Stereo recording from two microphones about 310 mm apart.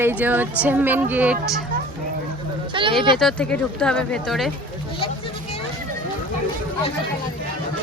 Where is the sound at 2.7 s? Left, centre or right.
Centre.